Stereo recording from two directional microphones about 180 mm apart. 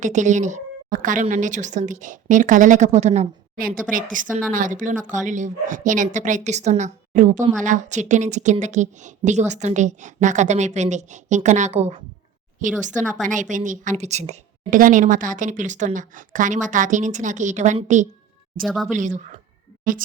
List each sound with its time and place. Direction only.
0.0 s a woman's voice: 45° right (ahead or behind)
3.5 s a woman's voice: 50° right (ahead or behind)
13.2 s a woman's voice: 45° right (ahead or behind)
18.6 s speech: centre (ahead or behind)
18.9 s a woman's voice: 45° right (ahead or behind)